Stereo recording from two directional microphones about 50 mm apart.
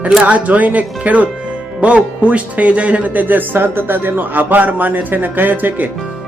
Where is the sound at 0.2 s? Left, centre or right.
Right.